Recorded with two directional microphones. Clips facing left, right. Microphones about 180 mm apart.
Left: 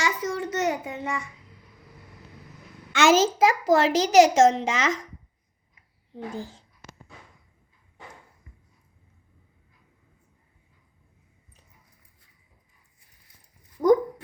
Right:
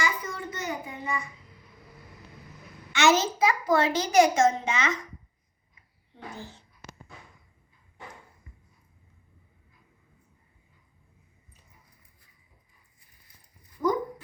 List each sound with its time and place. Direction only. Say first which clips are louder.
0.0 s child singing: left 4 dB; 85° left
2.9 s a child's voice: left 4 dB; 90° left
6.3 s speech: left 7 dB; 90° left
13.8 s a sound: left 8 dB; 45° left (ahead or behind)